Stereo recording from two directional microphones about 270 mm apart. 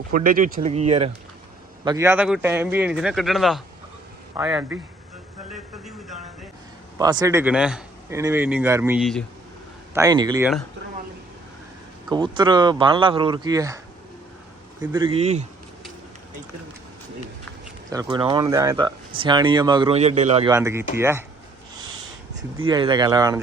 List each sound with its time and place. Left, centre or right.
0.1 s speech: right
1.8 s speech: centre
7.0 s speech: centre
9.9 s speech: centre
12.0 s speech: centre
14.8 s speech: centre
17.9 s speech: centre
20.6 s speech: centre
22.6 s speech: centre